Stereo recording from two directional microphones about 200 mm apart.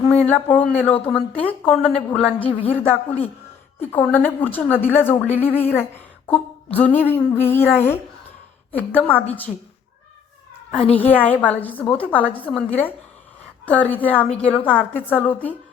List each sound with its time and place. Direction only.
0.1 s a sound: 5° left (ahead or behind)
0.5 s a woman's voice: 10° left (ahead or behind)
2.4 s a woman's voice: 30° left (ahead or behind)
2.6 s a woman's voice: 10° left (ahead or behind)
8.7 s a woman's voice: 10° left (ahead or behind)
10.9 s a woman's voice: 10° left (ahead or behind)